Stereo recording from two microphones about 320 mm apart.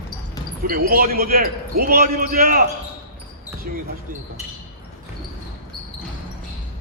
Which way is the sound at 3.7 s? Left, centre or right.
Right.